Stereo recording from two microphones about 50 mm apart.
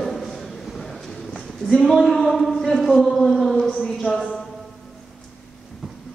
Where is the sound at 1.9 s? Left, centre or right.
Centre.